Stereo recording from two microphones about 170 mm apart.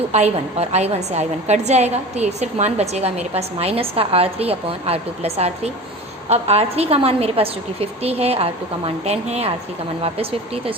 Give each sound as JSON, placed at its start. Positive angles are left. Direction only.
{"t": 0.1, "sound": "a woman's voice", "side_deg": -40}